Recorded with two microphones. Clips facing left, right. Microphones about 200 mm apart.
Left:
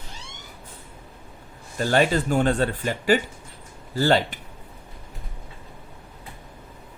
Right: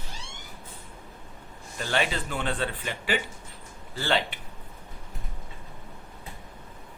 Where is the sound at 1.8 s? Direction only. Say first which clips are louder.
Left 8 dB; 40° left (ahead or behind).